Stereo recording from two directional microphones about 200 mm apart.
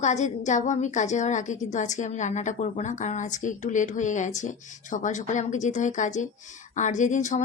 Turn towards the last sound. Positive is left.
turn(degrees=40)  # may be behind; listen again after turning